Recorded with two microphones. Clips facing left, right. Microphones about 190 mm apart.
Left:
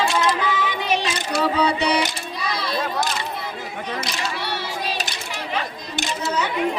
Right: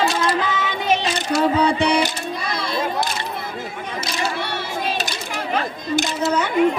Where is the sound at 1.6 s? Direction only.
50° right (ahead or behind).